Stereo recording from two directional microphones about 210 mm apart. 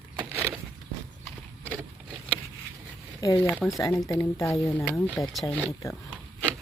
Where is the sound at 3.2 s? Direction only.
15° left (ahead or behind).